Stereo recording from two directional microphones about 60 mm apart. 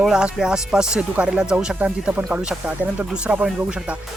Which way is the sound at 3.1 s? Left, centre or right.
Centre.